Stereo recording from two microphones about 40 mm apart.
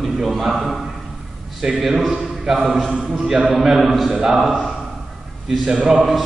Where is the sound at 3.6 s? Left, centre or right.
Centre.